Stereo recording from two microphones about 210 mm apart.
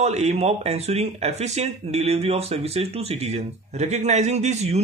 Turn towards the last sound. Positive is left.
turn(degrees=-30)  # may be behind; listen again after turning